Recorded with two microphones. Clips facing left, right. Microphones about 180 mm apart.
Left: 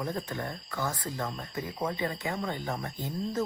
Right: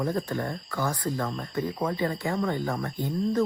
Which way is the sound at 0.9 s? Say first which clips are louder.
Right 5 dB; 25° left (ahead or behind).